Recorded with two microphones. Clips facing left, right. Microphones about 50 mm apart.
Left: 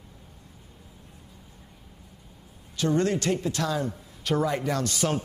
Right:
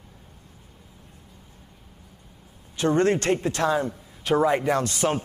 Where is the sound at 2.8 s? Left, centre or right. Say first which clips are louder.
Right 3 dB; right.